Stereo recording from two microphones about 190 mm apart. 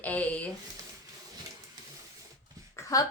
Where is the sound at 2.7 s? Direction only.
20° left (ahead or behind).